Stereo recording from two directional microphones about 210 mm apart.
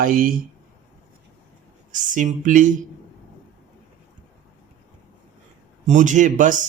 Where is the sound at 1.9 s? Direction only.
40° right (ahead or behind).